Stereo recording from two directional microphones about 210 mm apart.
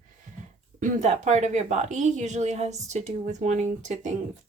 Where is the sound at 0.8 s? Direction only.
35° right (ahead or behind).